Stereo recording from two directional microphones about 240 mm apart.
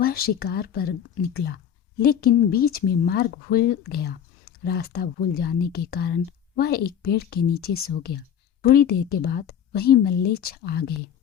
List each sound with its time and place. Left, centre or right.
0.0 s speech: left